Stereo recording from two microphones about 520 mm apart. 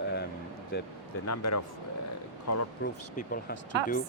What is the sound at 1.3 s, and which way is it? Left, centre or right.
Speech, left.